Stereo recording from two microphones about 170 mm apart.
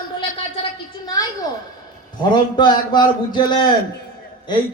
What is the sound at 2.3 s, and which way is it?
Speech, 25° left (ahead or behind).